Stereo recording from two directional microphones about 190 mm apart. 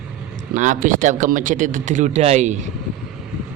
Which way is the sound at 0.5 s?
40° right (ahead or behind).